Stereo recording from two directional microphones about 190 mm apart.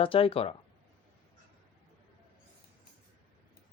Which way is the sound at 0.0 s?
30° left (ahead or behind).